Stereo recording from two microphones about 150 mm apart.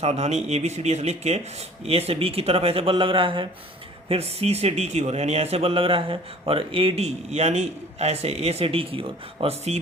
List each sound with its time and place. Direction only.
0.0 s speech: 45° right (ahead or behind)